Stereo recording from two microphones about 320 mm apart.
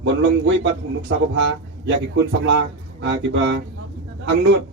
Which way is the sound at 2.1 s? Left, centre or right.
Right.